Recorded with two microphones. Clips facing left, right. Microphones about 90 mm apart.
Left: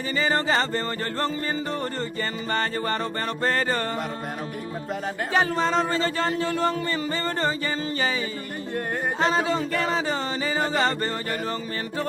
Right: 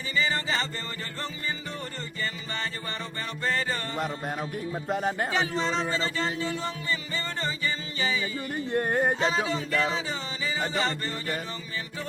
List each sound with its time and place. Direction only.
0.1 s music: 45° left (ahead or behind)
2.5 s music: 50° left (ahead or behind)
5.3 s music: 50° left (ahead or behind)